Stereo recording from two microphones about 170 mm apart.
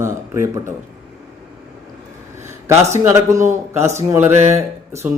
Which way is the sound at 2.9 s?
15° right (ahead or behind).